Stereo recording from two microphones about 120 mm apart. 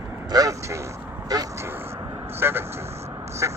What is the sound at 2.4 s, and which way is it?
Speech, 20° right (ahead or behind).